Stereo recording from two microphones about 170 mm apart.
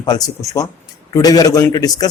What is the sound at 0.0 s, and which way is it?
Speech, 20° left (ahead or behind).